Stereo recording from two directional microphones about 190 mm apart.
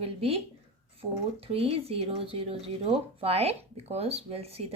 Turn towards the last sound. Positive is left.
turn(degrees=-30)  # may be behind; listen again after turning